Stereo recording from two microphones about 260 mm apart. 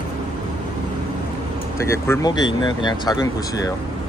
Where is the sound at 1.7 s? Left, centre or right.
Centre.